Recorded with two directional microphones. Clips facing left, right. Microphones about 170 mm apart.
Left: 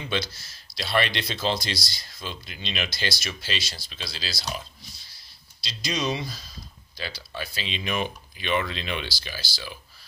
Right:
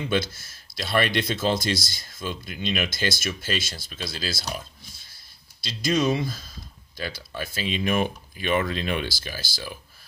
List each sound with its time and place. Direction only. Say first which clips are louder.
0.0 s speech: right 4 dB; 50° right (ahead or behind)